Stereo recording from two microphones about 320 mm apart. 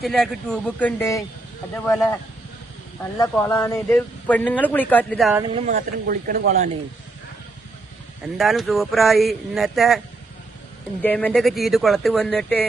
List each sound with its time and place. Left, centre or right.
0.0 s speech: centre
5.4 s speech: right
8.4 s speech: centre
11.0 s speech: centre